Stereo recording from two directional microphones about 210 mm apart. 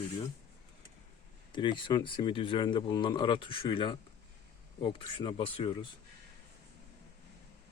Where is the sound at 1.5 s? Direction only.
20° left (ahead or behind).